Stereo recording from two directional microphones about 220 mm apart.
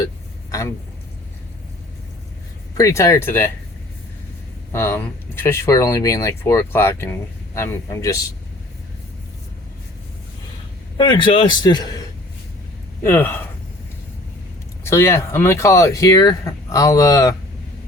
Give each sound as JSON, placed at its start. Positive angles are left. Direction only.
{"t": 2.7, "sound": "speech", "side_deg": 15}
{"t": 4.7, "sound": "speech", "side_deg": 10}
{"t": 10.9, "sound": "a man's voice", "side_deg": 20}
{"t": 14.8, "sound": "speech", "side_deg": 10}